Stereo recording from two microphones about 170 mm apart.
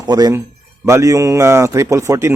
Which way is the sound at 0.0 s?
25° right (ahead or behind).